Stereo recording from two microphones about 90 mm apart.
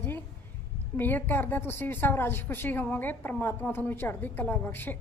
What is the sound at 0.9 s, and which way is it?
A woman's voice, 20° left (ahead or behind).